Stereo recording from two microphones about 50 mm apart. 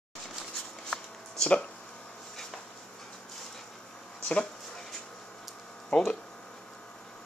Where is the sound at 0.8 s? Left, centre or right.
Centre.